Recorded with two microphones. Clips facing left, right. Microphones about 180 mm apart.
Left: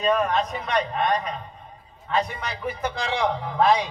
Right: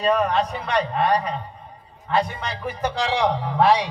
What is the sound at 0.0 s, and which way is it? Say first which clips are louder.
A man's voice: right 2 dB; 30° right (ahead or behind).